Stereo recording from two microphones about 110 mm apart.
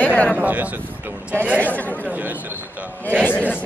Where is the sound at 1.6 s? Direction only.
15° left (ahead or behind).